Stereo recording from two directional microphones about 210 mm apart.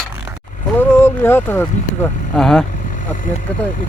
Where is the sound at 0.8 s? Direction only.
10° left (ahead or behind).